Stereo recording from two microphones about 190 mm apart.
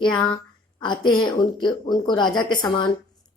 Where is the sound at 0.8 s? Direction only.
25° left (ahead or behind).